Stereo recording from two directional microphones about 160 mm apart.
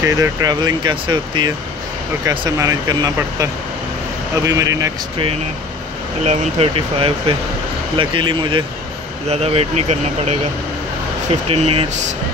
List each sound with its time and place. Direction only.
0.0 s speech: 20° right (ahead or behind)
4.5 s speech: 20° right (ahead or behind)
6.2 s speech: 35° right (ahead or behind)
9.3 s speech: 40° right (ahead or behind)
11.4 s speech: 40° right (ahead or behind)